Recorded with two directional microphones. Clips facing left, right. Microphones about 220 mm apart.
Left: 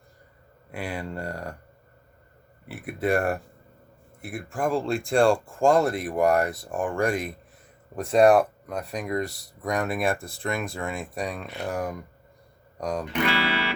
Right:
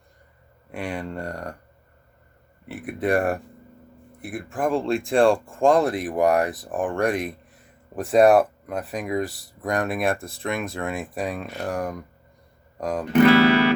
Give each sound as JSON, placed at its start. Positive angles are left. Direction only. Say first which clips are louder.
{"t": 0.7, "sound": "speech", "louder": "right 2 dB", "side_deg": 0}
{"t": 2.6, "sound": "speech", "louder": "right 2 dB", "side_deg": 0}
{"t": 13.1, "sound": "music", "louder": "right 14 dB", "side_deg": -45}